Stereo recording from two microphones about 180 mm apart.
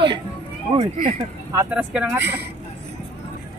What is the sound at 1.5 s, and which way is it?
Speech, 10° right (ahead or behind).